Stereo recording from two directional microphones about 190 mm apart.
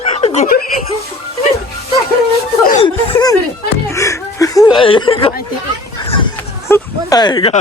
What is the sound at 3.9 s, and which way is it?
Snicker, 15° left (ahead or behind).